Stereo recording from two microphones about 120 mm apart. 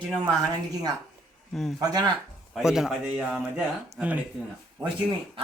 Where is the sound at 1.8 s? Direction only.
35° right (ahead or behind).